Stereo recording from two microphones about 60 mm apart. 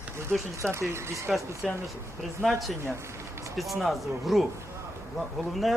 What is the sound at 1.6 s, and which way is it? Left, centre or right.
Speech, centre.